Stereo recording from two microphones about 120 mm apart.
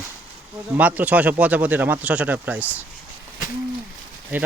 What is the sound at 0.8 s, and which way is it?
Speech, 15° right (ahead or behind).